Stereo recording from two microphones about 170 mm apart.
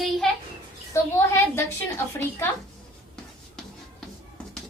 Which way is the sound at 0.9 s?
15° left (ahead or behind).